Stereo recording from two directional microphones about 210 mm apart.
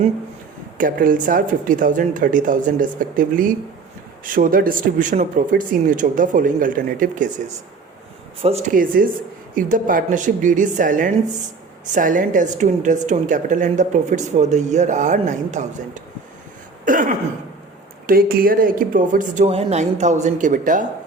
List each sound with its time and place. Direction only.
0.8 s a woman's voice: 40° right (ahead or behind)